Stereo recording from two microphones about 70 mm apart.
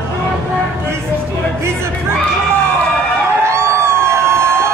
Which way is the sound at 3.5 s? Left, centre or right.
Right.